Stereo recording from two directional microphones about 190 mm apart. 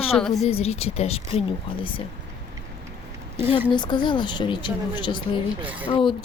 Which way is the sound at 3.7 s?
25° left (ahead or behind).